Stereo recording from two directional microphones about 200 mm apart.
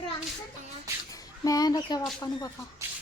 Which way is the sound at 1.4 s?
20° left (ahead or behind).